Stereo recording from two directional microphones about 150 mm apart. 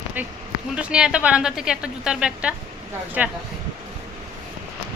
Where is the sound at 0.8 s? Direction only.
5° right (ahead or behind).